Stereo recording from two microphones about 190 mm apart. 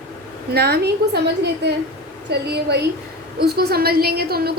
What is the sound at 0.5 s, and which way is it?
Speech, 60° right (ahead or behind).